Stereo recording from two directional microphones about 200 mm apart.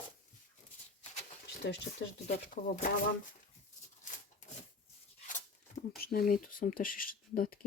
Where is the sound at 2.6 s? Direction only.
40° left (ahead or behind).